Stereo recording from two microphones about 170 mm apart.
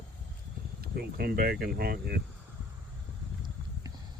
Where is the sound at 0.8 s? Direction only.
65° right (ahead or behind).